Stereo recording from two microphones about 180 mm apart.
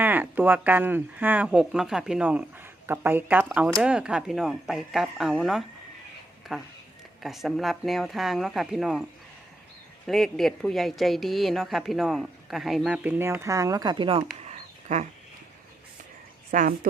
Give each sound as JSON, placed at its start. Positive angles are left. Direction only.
{"t": 0.0, "sound": "speech", "side_deg": -10}
{"t": 10.1, "sound": "speech", "side_deg": 0}
{"t": 14.3, "sound": "a sound", "side_deg": -40}
{"t": 16.5, "sound": "speech", "side_deg": -50}